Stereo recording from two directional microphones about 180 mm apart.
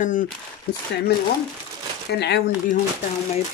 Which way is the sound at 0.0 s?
45° left (ahead or behind).